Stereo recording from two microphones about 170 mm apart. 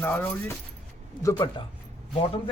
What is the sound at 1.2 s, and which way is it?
Speech, 25° left (ahead or behind).